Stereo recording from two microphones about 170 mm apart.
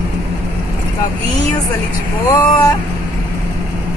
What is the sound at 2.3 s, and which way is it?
Speech, 20° left (ahead or behind).